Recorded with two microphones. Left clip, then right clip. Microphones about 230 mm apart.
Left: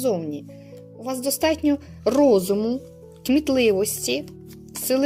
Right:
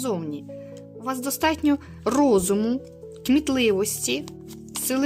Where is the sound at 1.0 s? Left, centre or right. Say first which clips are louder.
Left 2 dB; right.